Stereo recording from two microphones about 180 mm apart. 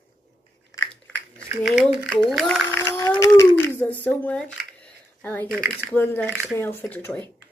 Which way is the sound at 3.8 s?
10° left (ahead or behind).